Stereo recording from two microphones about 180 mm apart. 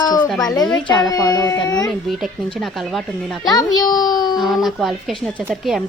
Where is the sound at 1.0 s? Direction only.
20° left (ahead or behind).